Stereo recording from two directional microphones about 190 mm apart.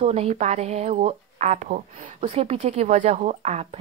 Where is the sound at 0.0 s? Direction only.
30° right (ahead or behind).